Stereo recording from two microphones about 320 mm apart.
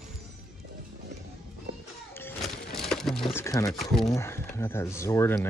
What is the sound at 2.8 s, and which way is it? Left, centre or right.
Crumpling, centre.